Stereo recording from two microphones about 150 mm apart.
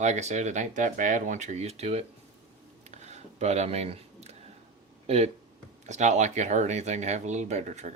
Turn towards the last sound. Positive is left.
turn(degrees=-50)  # may be behind; listen again after turning